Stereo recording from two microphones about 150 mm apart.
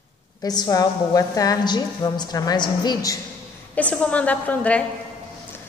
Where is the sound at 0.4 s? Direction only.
25° left (ahead or behind).